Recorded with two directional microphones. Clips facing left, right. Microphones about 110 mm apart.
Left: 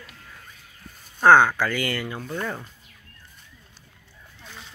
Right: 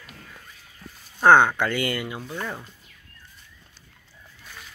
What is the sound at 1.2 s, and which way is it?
Speech, 20° right (ahead or behind).